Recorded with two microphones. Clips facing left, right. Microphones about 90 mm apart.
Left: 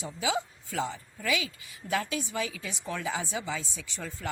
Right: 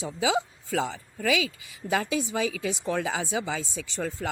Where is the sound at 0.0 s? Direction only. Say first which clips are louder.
Right 5 dB; 90° right.